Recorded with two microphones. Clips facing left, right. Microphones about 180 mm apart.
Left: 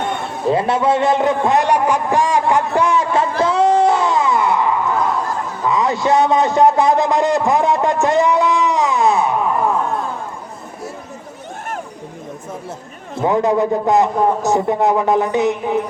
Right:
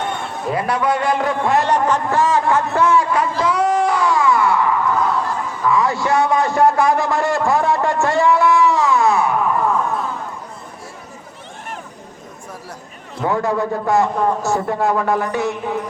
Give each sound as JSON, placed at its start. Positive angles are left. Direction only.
{"t": 0.4, "sound": "a man's voice", "side_deg": 25}
{"t": 3.4, "sound": "screaming", "side_deg": 25}
{"t": 5.6, "sound": "a sound", "side_deg": 20}
{"t": 13.1, "sound": "a man's voice", "side_deg": 20}